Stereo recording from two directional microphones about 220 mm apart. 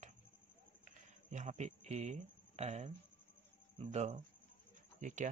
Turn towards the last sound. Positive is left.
turn(degrees=-35)  # may be behind; listen again after turning